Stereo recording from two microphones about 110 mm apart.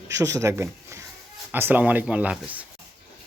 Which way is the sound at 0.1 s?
30° right (ahead or behind).